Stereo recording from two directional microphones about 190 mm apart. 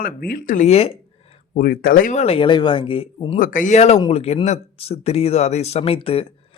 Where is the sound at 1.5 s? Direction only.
50° left (ahead or behind); by 3.3 s 30° left (ahead or behind).